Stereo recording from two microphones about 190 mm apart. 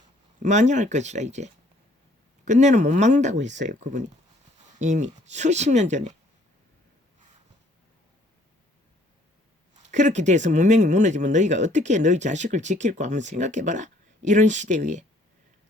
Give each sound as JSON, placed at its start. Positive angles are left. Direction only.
{"t": 0.4, "sound": "speech", "side_deg": -40}
{"t": 9.9, "sound": "speech", "side_deg": -40}